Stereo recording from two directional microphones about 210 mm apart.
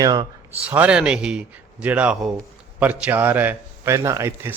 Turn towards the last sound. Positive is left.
turn(degrees=-15)  # may be behind; listen again after turning